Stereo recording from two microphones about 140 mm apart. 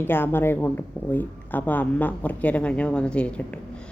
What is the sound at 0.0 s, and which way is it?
Speech, 15° left (ahead or behind).